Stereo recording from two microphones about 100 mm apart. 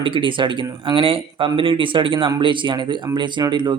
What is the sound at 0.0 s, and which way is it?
Speech, 55° right (ahead or behind).